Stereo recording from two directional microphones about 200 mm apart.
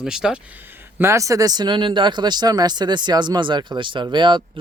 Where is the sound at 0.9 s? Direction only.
15° right (ahead or behind).